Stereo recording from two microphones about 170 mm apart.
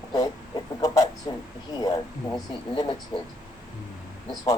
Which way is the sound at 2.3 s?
25° left (ahead or behind).